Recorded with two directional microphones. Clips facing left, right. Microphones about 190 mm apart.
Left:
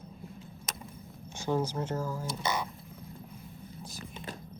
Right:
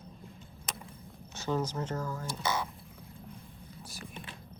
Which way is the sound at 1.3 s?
10° left (ahead or behind).